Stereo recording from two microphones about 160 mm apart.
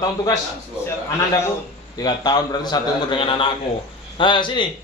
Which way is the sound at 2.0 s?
25° left (ahead or behind).